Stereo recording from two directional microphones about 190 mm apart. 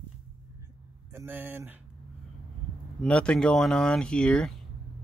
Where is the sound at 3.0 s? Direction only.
5° left (ahead or behind).